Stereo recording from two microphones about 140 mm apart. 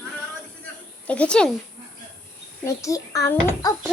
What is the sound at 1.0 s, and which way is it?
Speech, 10° left (ahead or behind).